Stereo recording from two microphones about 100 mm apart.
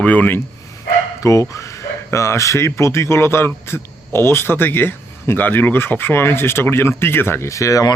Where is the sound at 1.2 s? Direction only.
30° left (ahead or behind).